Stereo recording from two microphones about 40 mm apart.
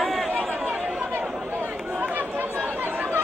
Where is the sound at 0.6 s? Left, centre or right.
Right.